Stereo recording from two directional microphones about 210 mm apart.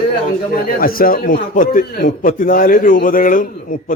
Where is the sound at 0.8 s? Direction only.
45° left (ahead or behind).